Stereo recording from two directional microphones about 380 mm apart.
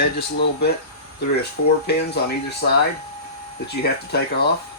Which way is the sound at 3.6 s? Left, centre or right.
Left.